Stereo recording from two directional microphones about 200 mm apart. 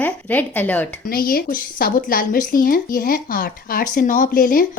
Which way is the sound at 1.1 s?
45° left (ahead or behind).